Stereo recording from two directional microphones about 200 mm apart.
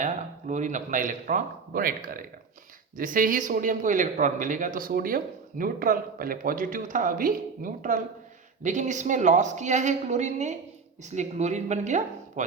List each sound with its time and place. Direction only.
0.0 s a man's voice: 35° right (ahead or behind)